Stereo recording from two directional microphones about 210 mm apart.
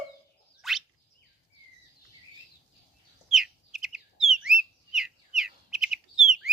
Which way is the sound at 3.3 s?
Centre (ahead or behind).